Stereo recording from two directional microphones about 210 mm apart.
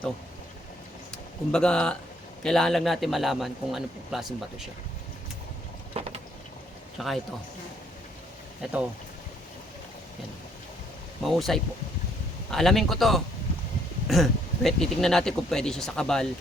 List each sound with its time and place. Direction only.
1.1 s a man's voice: 5° left (ahead or behind)
5.9 s a sound: 30° right (ahead or behind)
7.0 s a man's voice: centre (ahead or behind)
8.6 s a man's voice: 5° right (ahead or behind)
11.2 s a man's voice: centre (ahead or behind)